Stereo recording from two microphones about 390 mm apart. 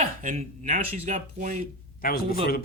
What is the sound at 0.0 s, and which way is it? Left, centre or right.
Speech, centre.